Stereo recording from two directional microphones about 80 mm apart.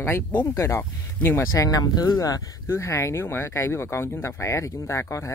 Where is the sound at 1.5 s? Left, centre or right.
Left.